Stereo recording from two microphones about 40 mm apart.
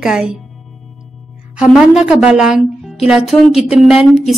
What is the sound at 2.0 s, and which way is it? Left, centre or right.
A woman's voice, right.